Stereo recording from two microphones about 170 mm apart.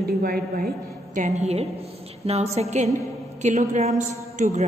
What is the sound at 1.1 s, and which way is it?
A woman's voice, 45° right (ahead or behind).